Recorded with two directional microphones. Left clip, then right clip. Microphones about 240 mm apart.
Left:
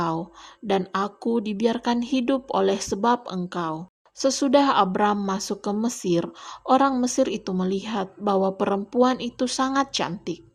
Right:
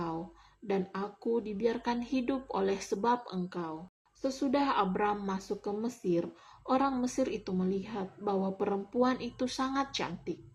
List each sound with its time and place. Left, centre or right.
0.7 s a woman's voice: left